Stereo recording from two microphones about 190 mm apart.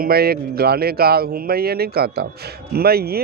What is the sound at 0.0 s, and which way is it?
A man's voice, 55° right (ahead or behind).